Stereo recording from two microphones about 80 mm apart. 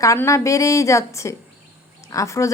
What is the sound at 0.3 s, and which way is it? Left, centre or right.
A woman's voice, left.